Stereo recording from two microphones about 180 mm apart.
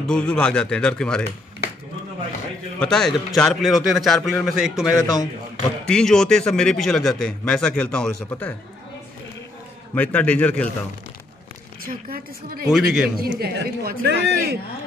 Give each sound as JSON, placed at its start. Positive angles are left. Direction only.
{"t": 0.0, "sound": "a man's voice", "side_deg": 5}
{"t": 2.8, "sound": "a man's voice", "side_deg": 5}
{"t": 4.9, "sound": "a man's voice", "side_deg": 20}
{"t": 5.9, "sound": "a man's voice", "side_deg": 5}
{"t": 9.9, "sound": "a man's voice", "side_deg": 10}
{"t": 11.8, "sound": "a woman's voice", "side_deg": -55}
{"t": 12.6, "sound": "a man's voice", "side_deg": -5}
{"t": 13.4, "sound": "a man's voice", "side_deg": -65}